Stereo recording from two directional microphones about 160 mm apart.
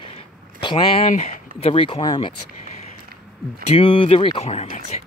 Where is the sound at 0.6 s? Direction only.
30° left (ahead or behind).